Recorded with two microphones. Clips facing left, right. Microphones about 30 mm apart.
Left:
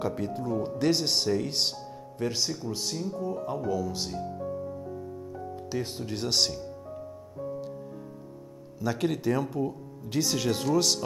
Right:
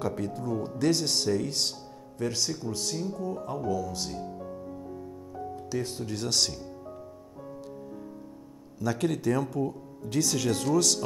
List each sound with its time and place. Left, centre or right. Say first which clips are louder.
0.0 s speech: left 1 dB; centre
5.7 s speech: even; centre
8.7 s speech: even; centre